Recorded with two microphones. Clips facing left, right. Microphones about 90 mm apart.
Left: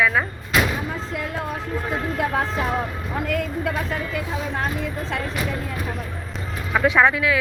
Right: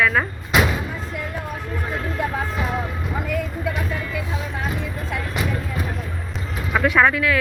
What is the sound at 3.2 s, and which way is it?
Speech, 90° left.